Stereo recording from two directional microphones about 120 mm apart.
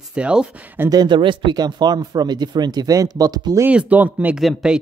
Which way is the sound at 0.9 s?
35° right (ahead or behind).